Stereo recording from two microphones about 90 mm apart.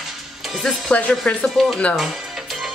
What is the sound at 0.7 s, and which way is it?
A woman's voice, 15° left (ahead or behind).